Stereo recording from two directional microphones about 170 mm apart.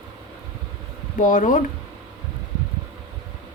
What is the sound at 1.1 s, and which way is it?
Speech, 50° left (ahead or behind).